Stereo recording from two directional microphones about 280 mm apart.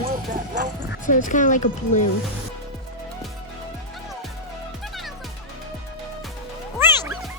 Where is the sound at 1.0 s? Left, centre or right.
Left.